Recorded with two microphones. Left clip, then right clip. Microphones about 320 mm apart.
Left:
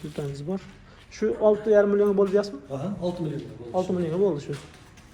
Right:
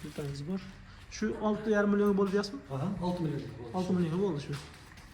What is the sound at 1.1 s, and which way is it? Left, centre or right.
A man's voice, centre.